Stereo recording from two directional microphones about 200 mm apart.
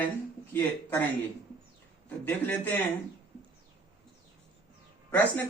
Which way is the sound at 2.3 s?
10° left (ahead or behind).